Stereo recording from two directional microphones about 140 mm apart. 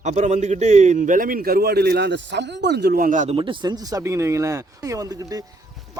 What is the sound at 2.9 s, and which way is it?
Speech, 75° right (ahead or behind).